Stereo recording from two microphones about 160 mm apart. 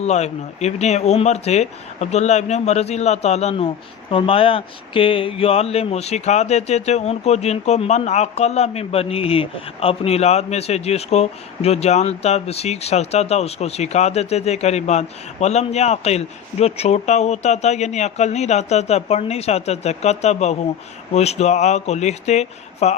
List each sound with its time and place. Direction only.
0.0 s speech: 45° left (ahead or behind)